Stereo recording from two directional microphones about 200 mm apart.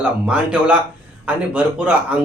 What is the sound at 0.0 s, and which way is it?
Speech, 5° right (ahead or behind).